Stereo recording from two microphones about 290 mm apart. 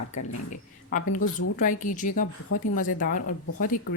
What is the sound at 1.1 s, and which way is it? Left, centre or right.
Speech, left.